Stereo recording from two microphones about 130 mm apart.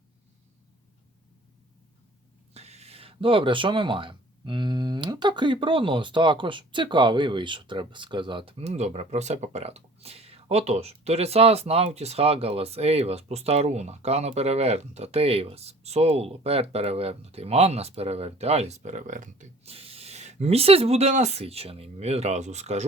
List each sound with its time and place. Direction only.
2.5 s speech: 55° right (ahead or behind); by 19.5 s 80° right
19.6 s speech: 50° right (ahead or behind)